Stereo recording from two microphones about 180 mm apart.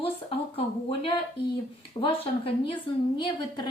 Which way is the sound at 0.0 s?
30° left (ahead or behind).